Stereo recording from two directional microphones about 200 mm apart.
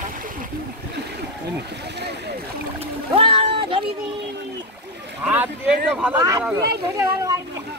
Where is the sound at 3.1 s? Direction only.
25° right (ahead or behind).